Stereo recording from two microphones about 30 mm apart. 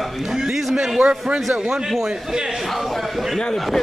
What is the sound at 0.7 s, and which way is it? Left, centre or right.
Speech, right.